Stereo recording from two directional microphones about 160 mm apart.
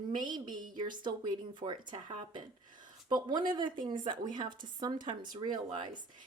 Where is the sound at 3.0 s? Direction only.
30° right (ahead or behind).